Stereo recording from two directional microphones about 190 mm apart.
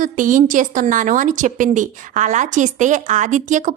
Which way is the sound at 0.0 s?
45° right (ahead or behind).